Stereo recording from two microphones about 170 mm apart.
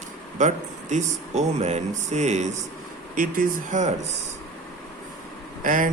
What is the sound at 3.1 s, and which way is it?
Speech, 55° right (ahead or behind).